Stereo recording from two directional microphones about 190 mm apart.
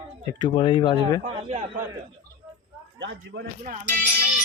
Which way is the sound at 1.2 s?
40° right (ahead or behind).